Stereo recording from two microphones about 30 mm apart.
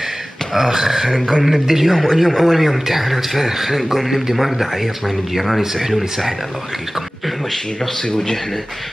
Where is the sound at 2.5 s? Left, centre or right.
Centre.